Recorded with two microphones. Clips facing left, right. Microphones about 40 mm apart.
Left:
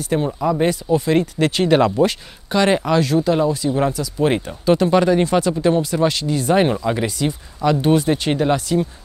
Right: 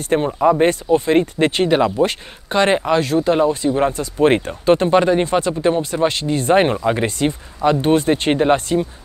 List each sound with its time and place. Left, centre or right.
0.4 s speech: right
1.7 s speech: centre
2.0 s speech: right
6.7 s speech: right
7.1 s speech: right